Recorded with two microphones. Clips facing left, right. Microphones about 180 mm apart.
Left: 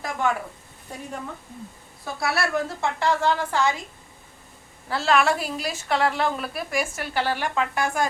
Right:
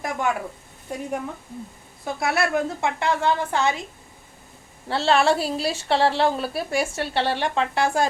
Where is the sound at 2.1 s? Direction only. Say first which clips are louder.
Right 3 dB; 20° right (ahead or behind).